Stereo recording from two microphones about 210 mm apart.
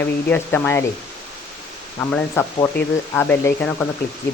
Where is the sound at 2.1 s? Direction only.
10° left (ahead or behind).